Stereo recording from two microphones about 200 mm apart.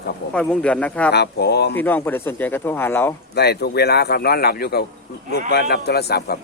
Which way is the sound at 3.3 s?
55° left (ahead or behind).